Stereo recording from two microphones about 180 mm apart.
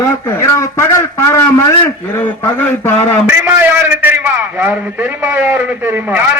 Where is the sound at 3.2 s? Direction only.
10° right (ahead or behind).